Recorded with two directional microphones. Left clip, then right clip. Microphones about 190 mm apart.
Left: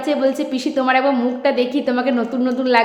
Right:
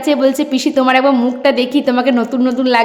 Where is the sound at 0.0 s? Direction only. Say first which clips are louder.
Right 5 dB; 30° right (ahead or behind).